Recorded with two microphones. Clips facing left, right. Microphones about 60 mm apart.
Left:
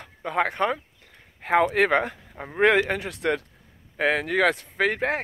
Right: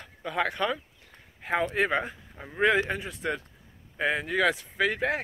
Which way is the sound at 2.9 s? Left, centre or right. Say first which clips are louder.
Left 6 dB; left.